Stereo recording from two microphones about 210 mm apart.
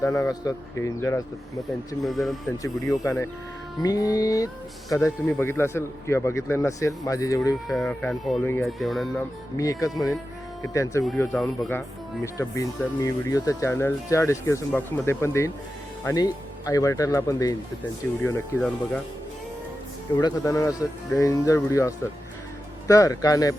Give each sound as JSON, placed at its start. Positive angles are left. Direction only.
{"t": 0.0, "sound": "speech", "side_deg": 15}
{"t": 2.0, "sound": "speech", "side_deg": 0}
{"t": 2.9, "sound": "speech", "side_deg": 15}
{"t": 7.7, "sound": "speech", "side_deg": 5}
{"t": 9.6, "sound": "speech", "side_deg": 15}
{"t": 12.2, "sound": "speech", "side_deg": 15}
{"t": 20.1, "sound": "speech", "side_deg": 15}